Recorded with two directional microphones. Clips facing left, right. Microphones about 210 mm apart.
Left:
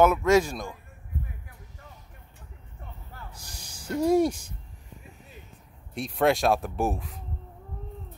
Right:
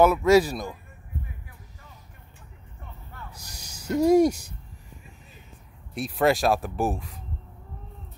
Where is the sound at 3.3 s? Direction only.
40° right (ahead or behind).